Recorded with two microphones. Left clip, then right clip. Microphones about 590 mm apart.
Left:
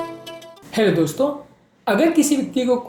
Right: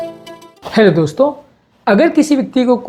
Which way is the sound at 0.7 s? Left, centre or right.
Right.